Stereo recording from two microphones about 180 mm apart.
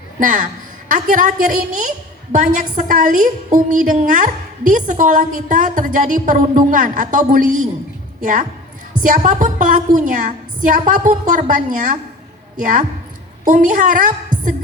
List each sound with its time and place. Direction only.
0.2 s a woman's voice: 45° right (ahead or behind)